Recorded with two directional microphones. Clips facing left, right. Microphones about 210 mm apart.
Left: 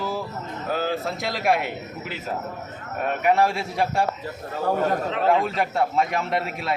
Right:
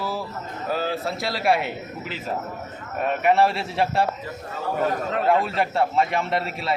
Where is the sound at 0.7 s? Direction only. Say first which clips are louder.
Even; centre (ahead or behind).